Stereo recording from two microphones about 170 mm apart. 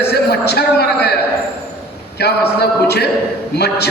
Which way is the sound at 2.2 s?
75° left (ahead or behind).